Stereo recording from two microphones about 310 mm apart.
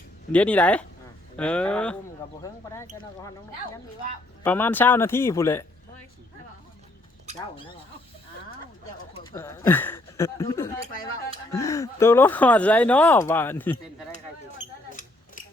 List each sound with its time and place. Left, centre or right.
0.3 s speech: centre
4.4 s speech: centre
9.1 s speech: centre
15.4 s scissors: left